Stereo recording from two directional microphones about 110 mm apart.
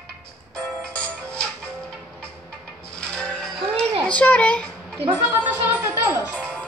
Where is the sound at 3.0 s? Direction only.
10° left (ahead or behind).